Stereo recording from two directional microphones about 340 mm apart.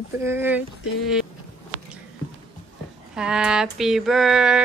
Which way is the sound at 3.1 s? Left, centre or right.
Centre.